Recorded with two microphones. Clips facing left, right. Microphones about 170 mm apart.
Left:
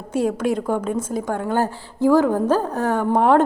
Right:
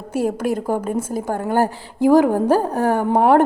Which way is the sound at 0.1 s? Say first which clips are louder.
Even; 5° right (ahead or behind).